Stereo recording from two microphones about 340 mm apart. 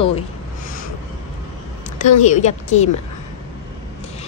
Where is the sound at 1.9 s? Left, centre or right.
Left.